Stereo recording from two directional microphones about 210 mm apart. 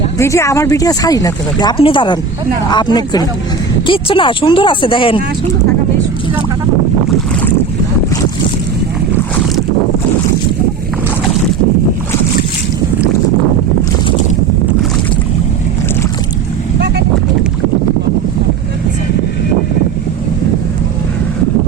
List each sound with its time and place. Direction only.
0.2 s speech: 15° left (ahead or behind)